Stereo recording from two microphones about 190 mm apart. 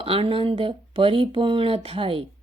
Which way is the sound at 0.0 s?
30° right (ahead or behind).